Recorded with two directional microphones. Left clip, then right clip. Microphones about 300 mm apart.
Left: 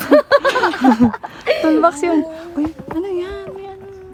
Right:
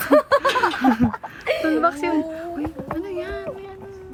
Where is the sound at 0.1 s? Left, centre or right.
Left.